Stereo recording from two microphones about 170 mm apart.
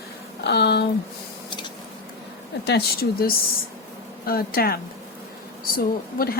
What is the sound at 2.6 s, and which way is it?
A woman's voice, 75° left (ahead or behind).